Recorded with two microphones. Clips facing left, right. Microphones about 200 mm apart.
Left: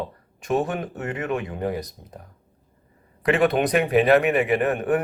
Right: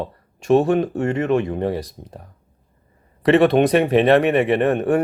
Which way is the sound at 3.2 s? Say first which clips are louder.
Right 6 dB; 30° right (ahead or behind).